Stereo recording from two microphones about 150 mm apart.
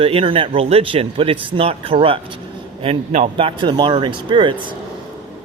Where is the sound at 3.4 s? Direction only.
35° right (ahead or behind).